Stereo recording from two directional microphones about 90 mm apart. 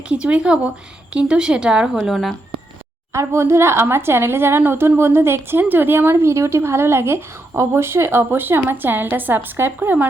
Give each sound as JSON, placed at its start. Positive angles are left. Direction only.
{"t": 0.1, "sound": "a woman's voice", "side_deg": -10}
{"t": 2.0, "sound": "speech", "side_deg": 0}
{"t": 3.1, "sound": "speech", "side_deg": -30}